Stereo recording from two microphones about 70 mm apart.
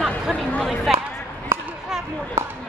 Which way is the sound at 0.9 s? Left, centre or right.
Centre.